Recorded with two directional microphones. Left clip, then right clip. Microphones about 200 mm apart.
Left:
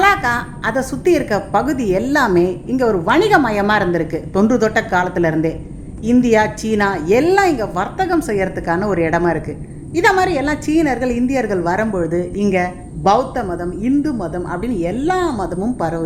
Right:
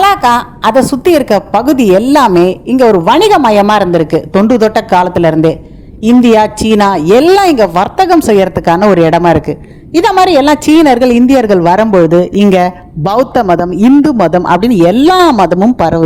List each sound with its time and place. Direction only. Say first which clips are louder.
0.0 s a woman's voice: right 7 dB; 35° right (ahead or behind)